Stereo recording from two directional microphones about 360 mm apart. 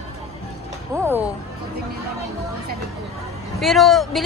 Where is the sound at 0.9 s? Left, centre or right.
Centre.